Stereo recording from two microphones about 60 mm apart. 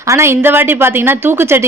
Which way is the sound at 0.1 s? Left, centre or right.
Right.